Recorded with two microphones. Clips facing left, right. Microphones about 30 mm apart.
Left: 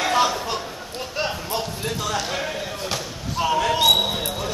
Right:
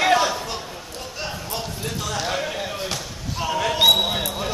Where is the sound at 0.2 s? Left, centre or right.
Centre.